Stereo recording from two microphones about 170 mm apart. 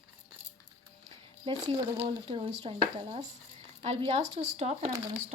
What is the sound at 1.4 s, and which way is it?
Speech, 30° right (ahead or behind).